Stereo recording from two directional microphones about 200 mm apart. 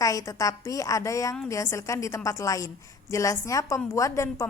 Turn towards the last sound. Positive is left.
turn(degrees=15)  # may be behind; listen again after turning